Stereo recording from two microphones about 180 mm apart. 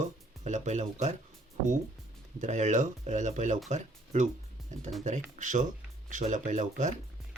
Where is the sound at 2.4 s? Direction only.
40° right (ahead or behind).